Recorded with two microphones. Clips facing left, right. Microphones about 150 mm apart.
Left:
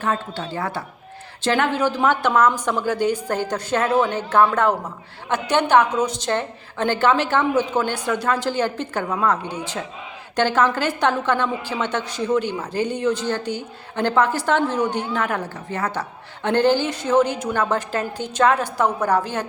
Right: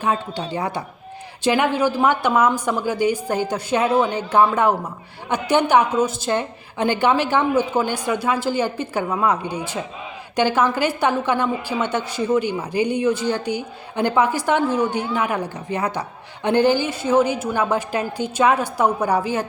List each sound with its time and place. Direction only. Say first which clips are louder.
0.0 s a woman's voice: right 2 dB; 15° right (ahead or behind)